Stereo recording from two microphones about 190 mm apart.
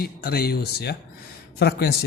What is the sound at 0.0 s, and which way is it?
Speech, 55° left (ahead or behind).